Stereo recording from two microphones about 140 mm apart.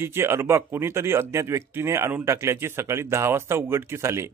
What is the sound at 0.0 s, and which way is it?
Speech, 20° right (ahead or behind).